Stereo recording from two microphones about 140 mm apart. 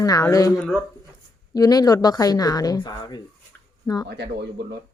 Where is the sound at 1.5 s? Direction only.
25° left (ahead or behind).